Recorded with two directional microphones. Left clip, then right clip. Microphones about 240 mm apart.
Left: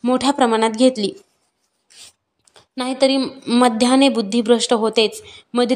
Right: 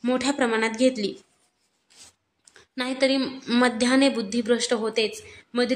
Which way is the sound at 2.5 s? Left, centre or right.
Centre.